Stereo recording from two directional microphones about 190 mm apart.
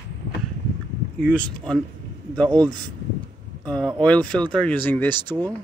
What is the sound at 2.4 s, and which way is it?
Speech, 20° right (ahead or behind).